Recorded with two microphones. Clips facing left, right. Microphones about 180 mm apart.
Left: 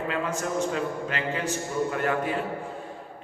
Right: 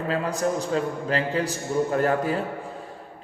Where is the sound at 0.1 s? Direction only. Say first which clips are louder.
Right 6 dB; 35° right (ahead or behind).